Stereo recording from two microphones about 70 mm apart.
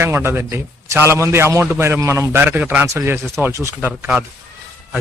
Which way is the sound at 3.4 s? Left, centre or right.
Right.